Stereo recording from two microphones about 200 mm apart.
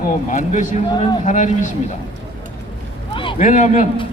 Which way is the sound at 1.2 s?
35° left (ahead or behind).